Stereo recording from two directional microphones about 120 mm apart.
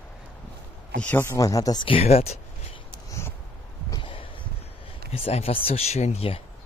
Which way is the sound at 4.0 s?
45° left (ahead or behind).